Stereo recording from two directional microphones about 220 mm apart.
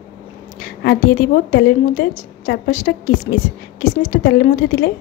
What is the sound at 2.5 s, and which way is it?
A woman's voice, 40° left (ahead or behind).